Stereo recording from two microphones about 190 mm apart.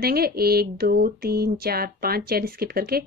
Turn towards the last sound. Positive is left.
turn(degrees=-55)  # may be behind; listen again after turning